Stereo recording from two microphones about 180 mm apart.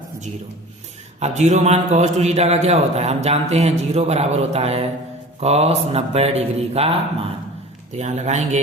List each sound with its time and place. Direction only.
1.2 s a man's voice: 40° right (ahead or behind)
7.9 s a man's voice: 40° right (ahead or behind)